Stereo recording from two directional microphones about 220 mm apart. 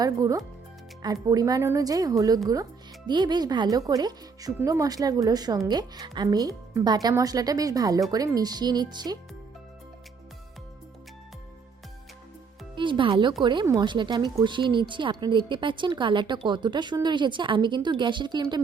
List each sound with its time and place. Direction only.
0.0 s speech: 15° right (ahead or behind)
12.7 s speech: 20° right (ahead or behind)